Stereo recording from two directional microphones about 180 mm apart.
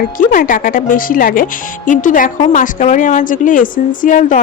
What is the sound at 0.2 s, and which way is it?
A woman's voice, 50° left (ahead or behind).